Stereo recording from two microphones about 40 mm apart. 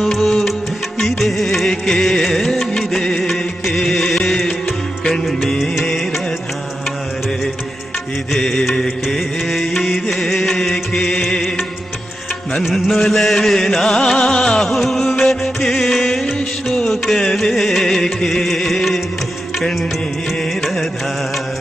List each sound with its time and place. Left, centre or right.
0.0 s music: centre
3.0 s music of bollywood: centre
3.3 s music: centre
3.8 s music: centre
8.3 s music: centre
12.7 s music: centre
16.7 s music: left